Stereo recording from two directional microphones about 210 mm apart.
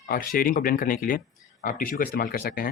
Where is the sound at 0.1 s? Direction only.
45° left (ahead or behind).